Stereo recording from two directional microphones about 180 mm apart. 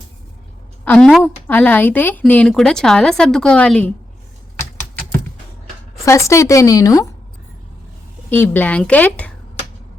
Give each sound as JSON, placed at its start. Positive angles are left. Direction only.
{"t": 0.9, "sound": "speech", "side_deg": 5}
{"t": 6.1, "sound": "speech", "side_deg": 15}
{"t": 8.3, "sound": "speech", "side_deg": 10}